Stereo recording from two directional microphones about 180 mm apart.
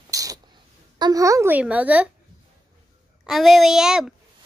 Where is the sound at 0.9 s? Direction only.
20° right (ahead or behind).